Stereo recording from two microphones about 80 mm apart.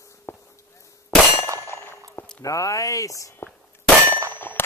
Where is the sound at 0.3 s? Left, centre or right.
Left.